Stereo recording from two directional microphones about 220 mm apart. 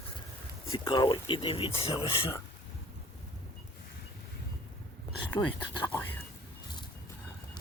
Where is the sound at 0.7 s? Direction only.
25° left (ahead or behind).